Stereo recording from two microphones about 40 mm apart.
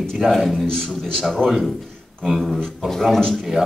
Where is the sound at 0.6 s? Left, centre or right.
Centre.